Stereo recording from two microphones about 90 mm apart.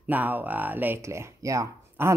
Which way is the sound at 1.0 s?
30° right (ahead or behind).